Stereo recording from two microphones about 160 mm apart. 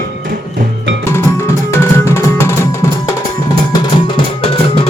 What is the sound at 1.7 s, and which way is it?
Music, 15° left (ahead or behind).